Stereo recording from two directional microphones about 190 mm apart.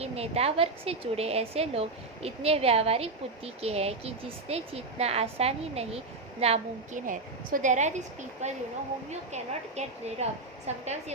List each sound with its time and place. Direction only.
0.0 s a woman's voice: 35° right (ahead or behind)